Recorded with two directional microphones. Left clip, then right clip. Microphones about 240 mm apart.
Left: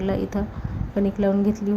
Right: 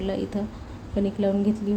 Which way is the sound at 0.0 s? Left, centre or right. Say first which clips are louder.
Left 3 dB; centre.